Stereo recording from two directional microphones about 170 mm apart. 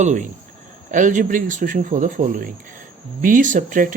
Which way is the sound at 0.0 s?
45° right (ahead or behind).